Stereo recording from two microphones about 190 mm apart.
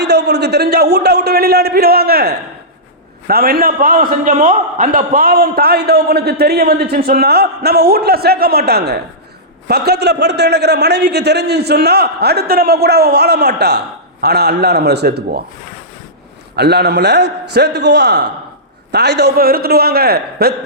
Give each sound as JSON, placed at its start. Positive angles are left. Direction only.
{"t": 0.0, "sound": "a man's voice", "side_deg": -60}
{"t": 16.6, "sound": "a man's voice", "side_deg": -60}